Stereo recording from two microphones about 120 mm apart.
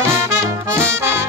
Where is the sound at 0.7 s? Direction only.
20° right (ahead or behind).